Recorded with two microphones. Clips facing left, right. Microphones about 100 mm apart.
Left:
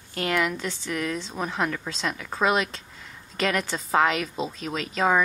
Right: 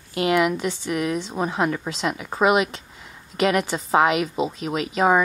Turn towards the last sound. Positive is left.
turn(degrees=-15)  # may be behind; listen again after turning